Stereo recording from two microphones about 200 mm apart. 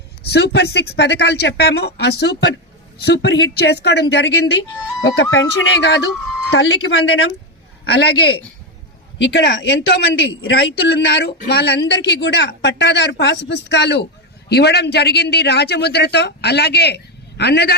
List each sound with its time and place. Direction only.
0.2 s speech: 55° left (ahead or behind)
9.1 s speech: 65° left (ahead or behind)